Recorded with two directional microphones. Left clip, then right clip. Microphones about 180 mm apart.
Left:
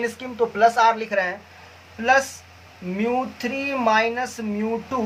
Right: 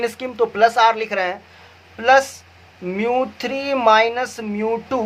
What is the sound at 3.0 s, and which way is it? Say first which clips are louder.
A man's voice: right 4 dB; 50° right (ahead or behind).